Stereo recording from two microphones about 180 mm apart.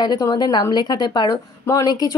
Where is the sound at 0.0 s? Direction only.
20° left (ahead or behind).